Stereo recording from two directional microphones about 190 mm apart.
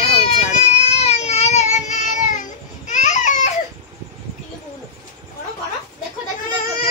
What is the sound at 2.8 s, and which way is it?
Baby cry, 40° left (ahead or behind).